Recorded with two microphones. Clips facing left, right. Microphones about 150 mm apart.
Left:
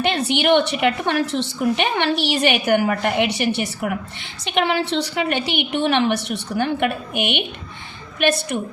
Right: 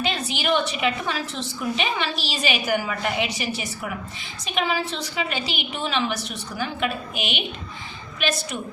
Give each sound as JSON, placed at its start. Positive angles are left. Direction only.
{"t": 0.0, "sound": "a woman's voice", "side_deg": 65}